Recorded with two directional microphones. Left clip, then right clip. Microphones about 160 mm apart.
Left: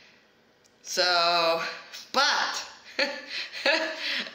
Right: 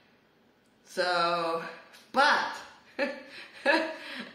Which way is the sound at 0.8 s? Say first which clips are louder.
Left 4 dB; 15° right (ahead or behind).